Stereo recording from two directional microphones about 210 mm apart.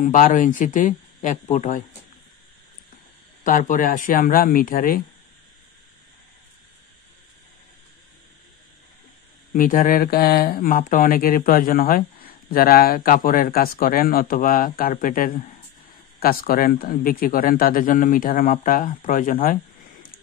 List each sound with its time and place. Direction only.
0.0 s speech: 40° left (ahead or behind)
3.4 s speech: 40° left (ahead or behind)
9.5 s speech: 40° left (ahead or behind)